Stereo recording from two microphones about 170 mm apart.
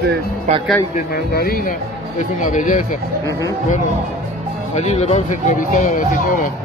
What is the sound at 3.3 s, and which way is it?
Speech, 20° left (ahead or behind).